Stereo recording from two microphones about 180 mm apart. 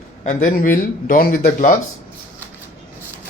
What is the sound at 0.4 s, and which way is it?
Speech, 50° left (ahead or behind).